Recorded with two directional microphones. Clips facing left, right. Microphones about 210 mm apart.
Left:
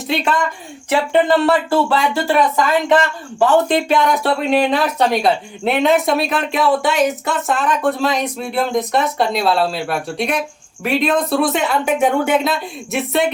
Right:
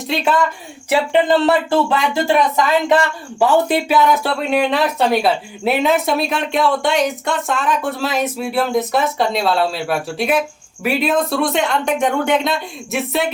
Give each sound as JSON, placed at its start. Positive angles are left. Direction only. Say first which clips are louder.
{"t": 0.1, "sound": "speech", "louder": "even", "side_deg": 0}
{"t": 0.9, "sound": "speech", "louder": "even", "side_deg": -20}